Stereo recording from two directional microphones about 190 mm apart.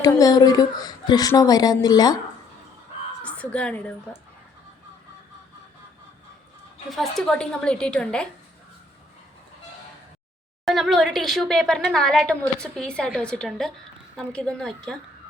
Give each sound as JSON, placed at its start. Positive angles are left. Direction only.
{"t": 0.0, "sound": "speech", "side_deg": 20}
{"t": 3.2, "sound": "a woman's voice", "side_deg": 5}
{"t": 6.9, "sound": "a woman's voice", "side_deg": 0}
{"t": 10.7, "sound": "a woman's voice", "side_deg": 0}